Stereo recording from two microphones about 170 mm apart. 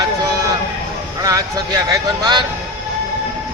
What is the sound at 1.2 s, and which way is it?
A man's voice, 20° right (ahead or behind).